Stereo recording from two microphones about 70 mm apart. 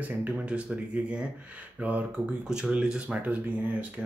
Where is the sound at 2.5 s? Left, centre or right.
Centre.